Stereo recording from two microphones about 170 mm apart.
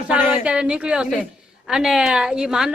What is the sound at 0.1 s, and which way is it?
A woman's voice, 5° right (ahead or behind).